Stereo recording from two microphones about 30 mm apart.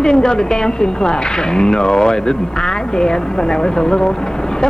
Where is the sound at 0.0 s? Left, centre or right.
Left.